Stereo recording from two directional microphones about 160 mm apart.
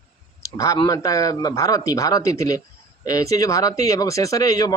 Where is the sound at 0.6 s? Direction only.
25° left (ahead or behind).